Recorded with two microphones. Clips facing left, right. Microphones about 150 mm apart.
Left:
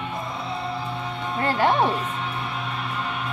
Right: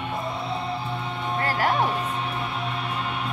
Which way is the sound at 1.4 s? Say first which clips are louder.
Left 4 dB; 25° left (ahead or behind).